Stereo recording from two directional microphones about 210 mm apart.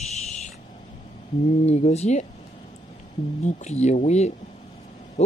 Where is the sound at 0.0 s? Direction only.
30° left (ahead or behind).